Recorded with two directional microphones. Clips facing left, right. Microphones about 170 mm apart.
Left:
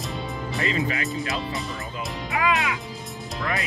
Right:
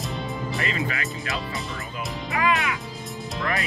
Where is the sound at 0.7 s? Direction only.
25° left (ahead or behind).